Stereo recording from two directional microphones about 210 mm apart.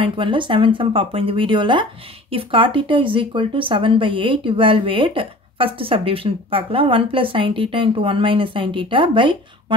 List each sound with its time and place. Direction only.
0.0 s speech: 25° right (ahead or behind)